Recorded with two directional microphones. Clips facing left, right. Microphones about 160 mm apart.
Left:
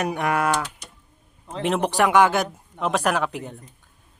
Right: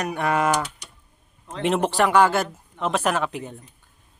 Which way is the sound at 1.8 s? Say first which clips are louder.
Left 1 dB; 15° left (ahead or behind).